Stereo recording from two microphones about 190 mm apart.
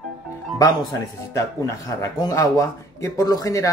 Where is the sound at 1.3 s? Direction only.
15° left (ahead or behind).